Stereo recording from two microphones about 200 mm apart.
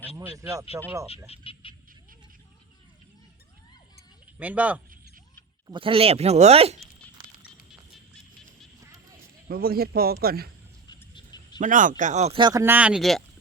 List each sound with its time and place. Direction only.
0.3 s speech: 15° right (ahead or behind)
1.3 s frog: 25° left (ahead or behind)
4.4 s speech: 5° right (ahead or behind)
5.6 s speech: 25° right (ahead or behind)
9.5 s a man's voice: 50° right (ahead or behind)
10.8 s frog: 20° left (ahead or behind)
11.6 s speech: 40° right (ahead or behind); by 13.2 s centre (ahead or behind)